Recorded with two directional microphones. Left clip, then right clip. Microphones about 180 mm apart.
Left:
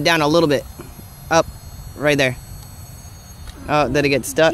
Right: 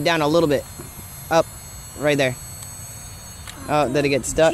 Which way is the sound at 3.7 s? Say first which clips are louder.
Left 2 dB; 40° left (ahead or behind).